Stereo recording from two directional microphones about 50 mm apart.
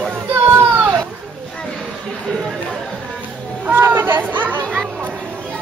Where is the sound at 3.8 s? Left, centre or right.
Right.